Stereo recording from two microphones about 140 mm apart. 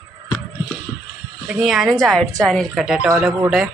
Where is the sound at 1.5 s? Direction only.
5° right (ahead or behind).